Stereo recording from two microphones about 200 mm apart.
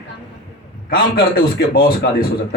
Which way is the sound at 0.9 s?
50° left (ahead or behind).